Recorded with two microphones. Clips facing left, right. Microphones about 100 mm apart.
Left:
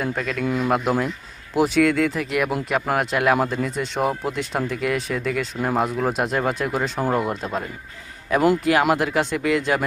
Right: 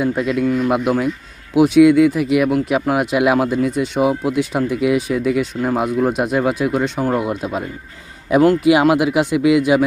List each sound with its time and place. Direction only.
0.0 s speech: 15° right (ahead or behind)
0.4 s speech: 10° left (ahead or behind)
0.7 s speech: 5° right (ahead or behind)
8.3 s speech: 15° right (ahead or behind)